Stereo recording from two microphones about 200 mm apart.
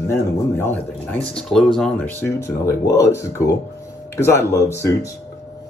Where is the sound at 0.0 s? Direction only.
10° left (ahead or behind).